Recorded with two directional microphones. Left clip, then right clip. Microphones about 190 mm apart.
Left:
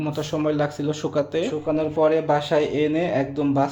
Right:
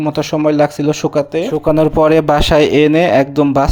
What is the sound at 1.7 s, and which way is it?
Speech, 45° right (ahead or behind).